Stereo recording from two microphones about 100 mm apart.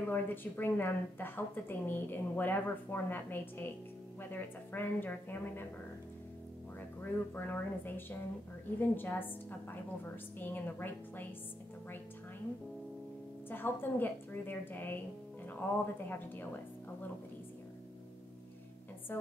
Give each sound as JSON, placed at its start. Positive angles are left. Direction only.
{"t": 0.0, "sound": "a woman's voice", "side_deg": 20}
{"t": 7.0, "sound": "a woman's voice", "side_deg": 20}
{"t": 13.5, "sound": "a woman's voice", "side_deg": 20}